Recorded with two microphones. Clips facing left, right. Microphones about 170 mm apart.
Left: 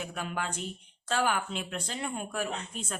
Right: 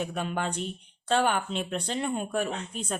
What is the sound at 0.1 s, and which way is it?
A woman's voice, 30° right (ahead or behind).